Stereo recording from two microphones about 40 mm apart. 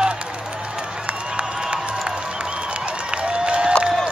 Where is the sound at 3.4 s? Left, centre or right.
Right.